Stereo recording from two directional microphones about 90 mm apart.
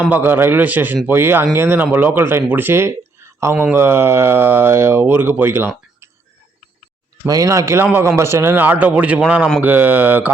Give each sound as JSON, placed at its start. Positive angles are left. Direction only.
{"t": 0.1, "sound": "speech", "side_deg": -25}
{"t": 7.3, "sound": "speech", "side_deg": -40}
{"t": 7.9, "sound": "speech", "side_deg": -25}